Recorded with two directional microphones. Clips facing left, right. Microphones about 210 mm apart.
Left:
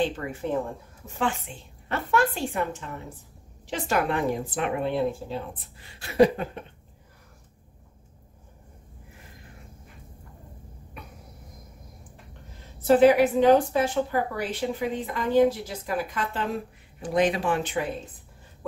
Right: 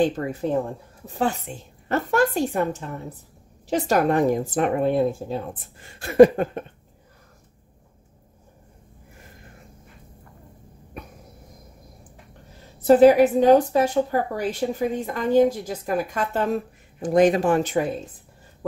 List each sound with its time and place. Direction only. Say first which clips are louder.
0.0 s a woman's voice: right 5 dB; 40° right (ahead or behind)
12.8 s a woman's voice: right 4 dB; 40° right (ahead or behind)